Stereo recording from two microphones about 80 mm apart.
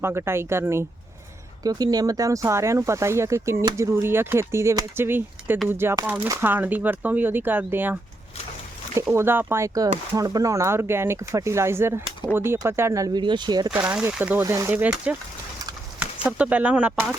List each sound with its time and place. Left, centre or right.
0.0 s speech: right
1.6 s speech: right
9.1 s speech: right
13.1 s speech: right
14.1 s speech: centre
14.4 s speech: right
15.1 s speech: centre